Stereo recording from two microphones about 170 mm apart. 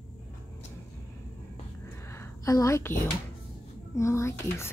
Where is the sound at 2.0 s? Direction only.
15° left (ahead or behind).